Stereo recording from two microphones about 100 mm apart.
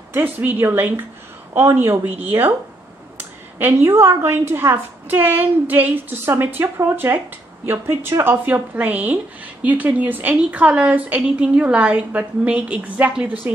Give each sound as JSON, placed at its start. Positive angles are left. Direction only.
{"t": 0.1, "sound": "a woman's voice", "side_deg": -20}